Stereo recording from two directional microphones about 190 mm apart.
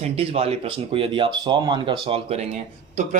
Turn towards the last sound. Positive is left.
turn(degrees=-35)  # may be behind; listen again after turning